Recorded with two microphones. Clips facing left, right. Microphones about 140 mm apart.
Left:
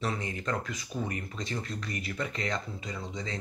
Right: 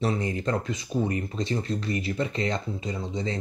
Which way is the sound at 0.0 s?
35° right (ahead or behind).